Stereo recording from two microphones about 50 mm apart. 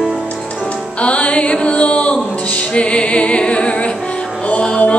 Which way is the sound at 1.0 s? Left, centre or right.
Left.